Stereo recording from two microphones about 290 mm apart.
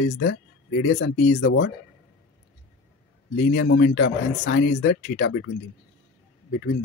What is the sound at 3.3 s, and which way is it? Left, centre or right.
Speech, left.